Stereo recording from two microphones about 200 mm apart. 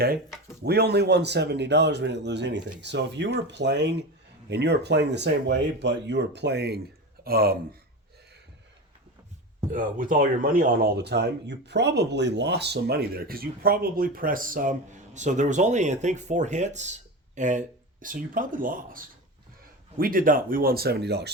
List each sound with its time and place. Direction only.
0.6 s speech: 55° right (ahead or behind)
9.7 s speech: 40° right (ahead or behind)